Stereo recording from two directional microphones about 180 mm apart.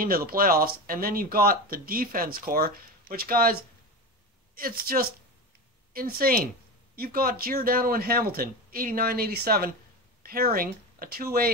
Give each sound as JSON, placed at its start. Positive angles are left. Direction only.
{"t": 0.0, "sound": "speech", "side_deg": -55}
{"t": 4.6, "sound": "speech", "side_deg": -55}